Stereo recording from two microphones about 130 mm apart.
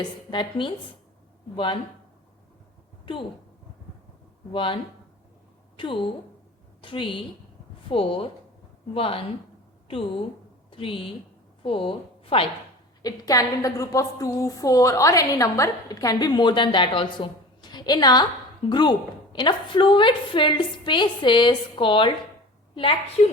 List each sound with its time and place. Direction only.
0.0 s a woman's voice: 35° left (ahead or behind)
3.1 s a woman's voice: 40° left (ahead or behind)
4.5 s a woman's voice: 40° left (ahead or behind)
10.7 s a woman's voice: 45° left (ahead or behind)
13.0 s a woman's voice: 30° left (ahead or behind)
23.2 s a woman's voice: 65° left (ahead or behind)